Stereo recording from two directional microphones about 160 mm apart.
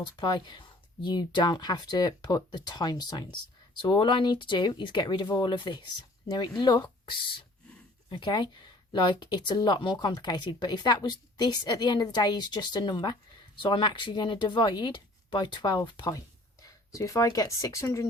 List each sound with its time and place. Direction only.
0.2 s speech: 30° left (ahead or behind)